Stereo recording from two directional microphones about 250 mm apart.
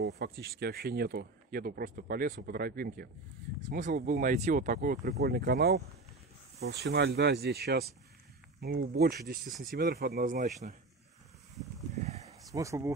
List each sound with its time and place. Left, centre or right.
0.0 s speech: right
11.9 s a sound: right
12.5 s speech: centre